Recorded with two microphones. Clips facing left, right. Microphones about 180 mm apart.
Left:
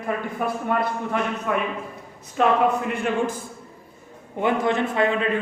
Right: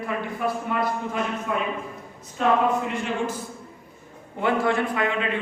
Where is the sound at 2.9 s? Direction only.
55° left (ahead or behind).